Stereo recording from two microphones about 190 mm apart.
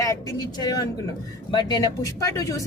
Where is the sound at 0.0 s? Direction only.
15° left (ahead or behind).